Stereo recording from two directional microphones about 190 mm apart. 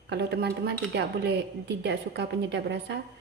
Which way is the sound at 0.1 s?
60° right (ahead or behind).